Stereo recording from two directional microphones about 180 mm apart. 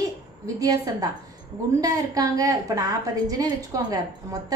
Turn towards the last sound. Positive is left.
turn(degrees=-20)  # may be behind; listen again after turning